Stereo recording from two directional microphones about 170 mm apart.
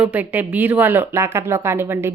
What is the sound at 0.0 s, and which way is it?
A woman's voice, 10° right (ahead or behind).